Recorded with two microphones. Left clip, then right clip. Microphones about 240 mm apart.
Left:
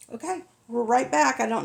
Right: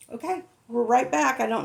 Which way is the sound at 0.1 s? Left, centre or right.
Left.